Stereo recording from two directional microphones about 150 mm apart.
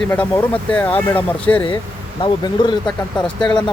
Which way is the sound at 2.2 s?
35° left (ahead or behind).